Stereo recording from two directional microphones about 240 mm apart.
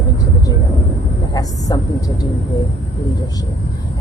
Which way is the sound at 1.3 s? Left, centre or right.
Centre.